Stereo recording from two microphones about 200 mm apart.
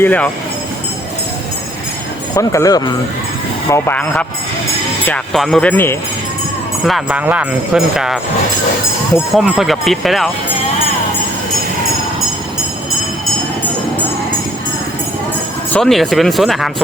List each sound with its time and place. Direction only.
0.0 s speech: 10° left (ahead or behind)
2.3 s speech: 15° left (ahead or behind)
6.8 s speech: 5° right (ahead or behind)
9.3 s speech: centre (ahead or behind)
15.7 s speech: centre (ahead or behind)